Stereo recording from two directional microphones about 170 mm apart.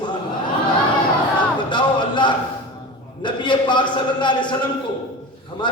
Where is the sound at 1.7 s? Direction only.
25° left (ahead or behind).